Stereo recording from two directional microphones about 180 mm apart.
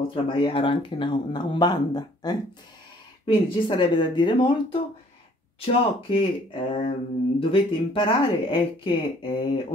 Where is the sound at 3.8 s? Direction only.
25° left (ahead or behind).